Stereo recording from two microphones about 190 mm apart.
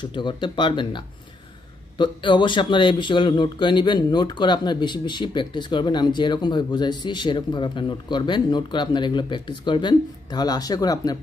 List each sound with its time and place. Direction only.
0.0 s speech: 25° left (ahead or behind)